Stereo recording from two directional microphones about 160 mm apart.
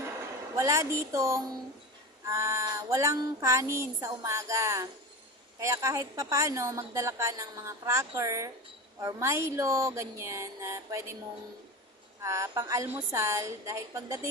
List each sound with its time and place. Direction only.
0.5 s a woman's voice: 20° right (ahead or behind)
12.2 s a woman's voice: 20° right (ahead or behind)